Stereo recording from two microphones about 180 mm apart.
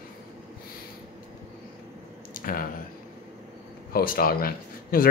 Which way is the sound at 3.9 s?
55° left (ahead or behind).